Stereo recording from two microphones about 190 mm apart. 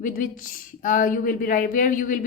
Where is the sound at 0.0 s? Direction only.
45° left (ahead or behind).